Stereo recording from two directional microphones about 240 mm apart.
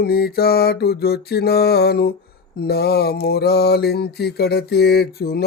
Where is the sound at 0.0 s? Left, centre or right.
Left.